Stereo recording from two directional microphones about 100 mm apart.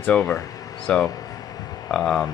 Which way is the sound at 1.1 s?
35° left (ahead or behind).